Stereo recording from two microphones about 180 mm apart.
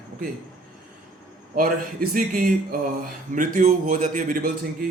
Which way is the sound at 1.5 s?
50° right (ahead or behind).